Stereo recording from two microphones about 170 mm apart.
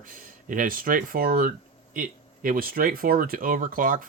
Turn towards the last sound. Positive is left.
turn(degrees=-55)  # may be behind; listen again after turning